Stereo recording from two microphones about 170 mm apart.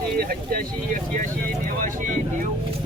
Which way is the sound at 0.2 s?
60° right (ahead or behind).